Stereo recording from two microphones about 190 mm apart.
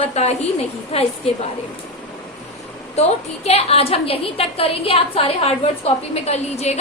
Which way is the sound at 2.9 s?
35° left (ahead or behind).